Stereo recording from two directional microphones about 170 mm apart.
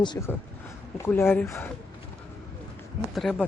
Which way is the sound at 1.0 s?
15° left (ahead or behind).